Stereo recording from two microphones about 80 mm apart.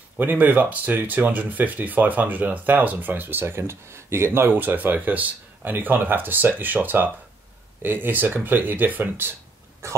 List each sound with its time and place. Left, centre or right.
0.2 s speech: right
9.8 s speech: right